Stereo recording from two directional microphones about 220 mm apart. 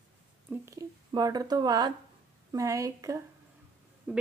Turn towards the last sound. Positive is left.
turn(degrees=-5)  # may be behind; listen again after turning